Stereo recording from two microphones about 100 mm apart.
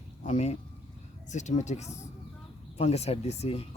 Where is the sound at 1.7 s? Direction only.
90° left.